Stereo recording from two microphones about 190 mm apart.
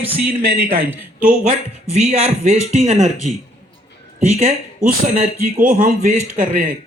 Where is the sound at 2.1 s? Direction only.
35° right (ahead or behind).